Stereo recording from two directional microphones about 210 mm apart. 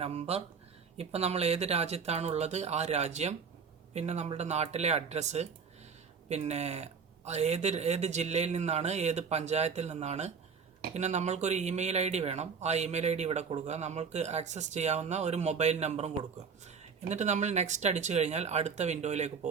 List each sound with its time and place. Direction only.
0.0 s speech: 30° right (ahead or behind)